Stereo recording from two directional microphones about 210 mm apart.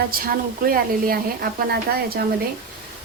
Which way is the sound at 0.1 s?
45° right (ahead or behind).